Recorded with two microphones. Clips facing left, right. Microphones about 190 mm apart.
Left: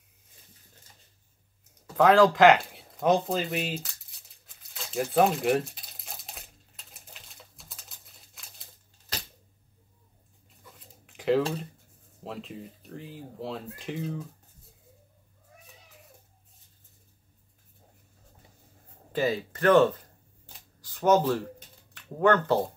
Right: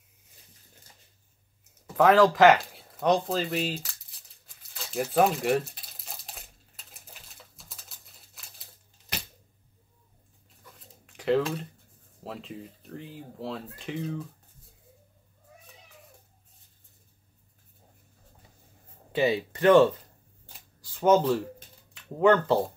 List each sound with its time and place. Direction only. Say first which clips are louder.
2.0 s speech: even; centre (ahead or behind)
4.7 s crumpling: even; centre (ahead or behind)
10.6 s a sound: even; centre (ahead or behind)
12.2 s speech: even; centre (ahead or behind)
19.1 s speech: right 2 dB; 15° right (ahead or behind)
20.8 s a sound: right 1 dB; 5° right (ahead or behind)